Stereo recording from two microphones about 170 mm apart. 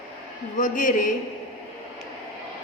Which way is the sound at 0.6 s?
50° left (ahead or behind).